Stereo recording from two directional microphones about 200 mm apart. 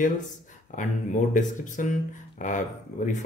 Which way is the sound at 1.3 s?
40° left (ahead or behind).